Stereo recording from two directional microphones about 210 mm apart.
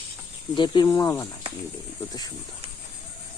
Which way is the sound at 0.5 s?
20° left (ahead or behind).